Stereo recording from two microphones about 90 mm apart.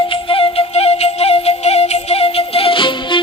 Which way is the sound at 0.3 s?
80° left.